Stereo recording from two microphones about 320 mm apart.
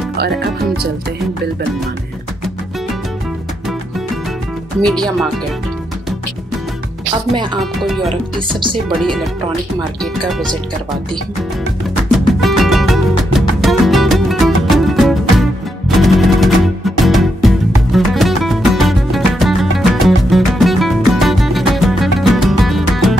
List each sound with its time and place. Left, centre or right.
4.8 s speech: centre
7.8 s speech: centre
8.4 s speech: centre
8.8 s speech: centre
12.3 s music: centre